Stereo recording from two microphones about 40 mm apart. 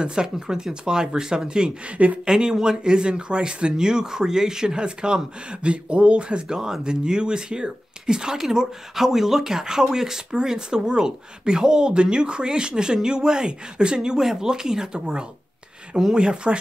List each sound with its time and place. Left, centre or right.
0.0 s speech: right
1.9 s speech: right
2.2 s speech: centre
6.4 s speech: centre